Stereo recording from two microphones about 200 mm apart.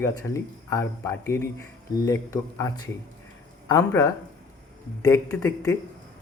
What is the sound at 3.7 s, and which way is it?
Speech, 15° left (ahead or behind).